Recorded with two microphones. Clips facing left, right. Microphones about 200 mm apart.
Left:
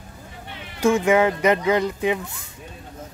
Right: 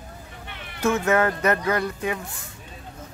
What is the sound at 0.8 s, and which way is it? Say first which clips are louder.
Speech: left 4 dB; 15° left (ahead or behind).